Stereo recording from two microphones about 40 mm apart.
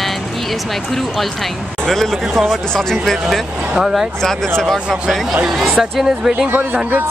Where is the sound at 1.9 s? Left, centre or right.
Centre.